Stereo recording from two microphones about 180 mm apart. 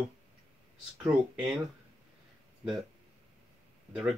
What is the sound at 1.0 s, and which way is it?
Speech, 5° right (ahead or behind).